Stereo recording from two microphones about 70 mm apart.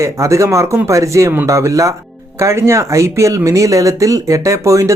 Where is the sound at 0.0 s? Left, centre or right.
Right.